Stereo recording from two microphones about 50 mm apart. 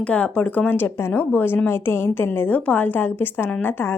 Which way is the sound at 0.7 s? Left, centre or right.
Left.